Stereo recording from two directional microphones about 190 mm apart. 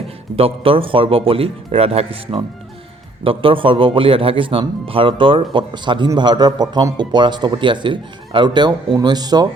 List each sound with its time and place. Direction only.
0.3 s speech: 30° right (ahead or behind)